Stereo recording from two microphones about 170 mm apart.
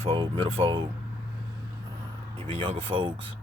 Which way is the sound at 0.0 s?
30° right (ahead or behind).